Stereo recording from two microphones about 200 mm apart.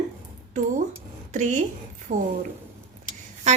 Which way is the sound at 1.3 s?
40° right (ahead or behind).